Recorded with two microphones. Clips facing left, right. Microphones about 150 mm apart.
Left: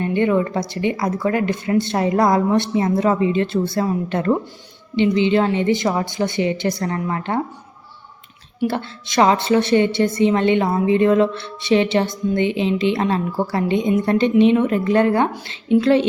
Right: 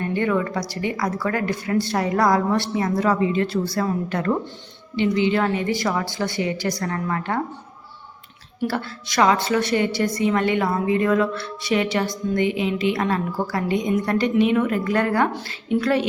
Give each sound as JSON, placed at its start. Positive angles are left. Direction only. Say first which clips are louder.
{"t": 0.0, "sound": "a woman's voice", "louder": "left 4 dB", "side_deg": 20}
{"t": 8.6, "sound": "a woman's voice", "louder": "left 3 dB", "side_deg": 25}